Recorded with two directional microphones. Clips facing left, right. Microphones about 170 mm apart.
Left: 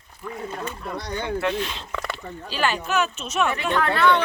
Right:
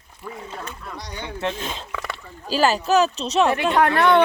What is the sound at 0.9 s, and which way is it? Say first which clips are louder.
Speech: left 6 dB; 55° left (ahead or behind).